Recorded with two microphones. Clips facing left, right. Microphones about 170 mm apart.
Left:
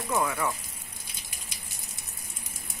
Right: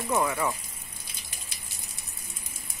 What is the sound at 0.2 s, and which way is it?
Speech, 10° right (ahead or behind).